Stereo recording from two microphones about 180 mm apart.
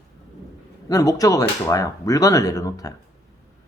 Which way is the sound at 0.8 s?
20° left (ahead or behind).